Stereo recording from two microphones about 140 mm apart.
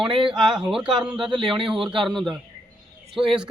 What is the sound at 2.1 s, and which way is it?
A man's voice, centre (ahead or behind).